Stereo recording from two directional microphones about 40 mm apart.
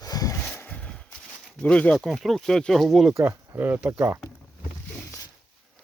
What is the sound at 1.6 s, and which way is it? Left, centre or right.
Speech, left.